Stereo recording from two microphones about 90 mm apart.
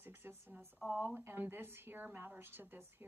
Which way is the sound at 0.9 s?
20° right (ahead or behind).